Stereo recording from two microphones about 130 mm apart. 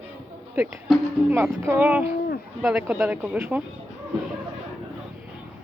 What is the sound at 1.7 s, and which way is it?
A woman's voice, 15° right (ahead or behind).